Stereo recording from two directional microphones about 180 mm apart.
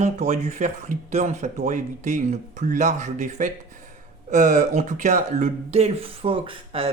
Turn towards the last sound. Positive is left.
turn(degrees=-30)  # may be behind; listen again after turning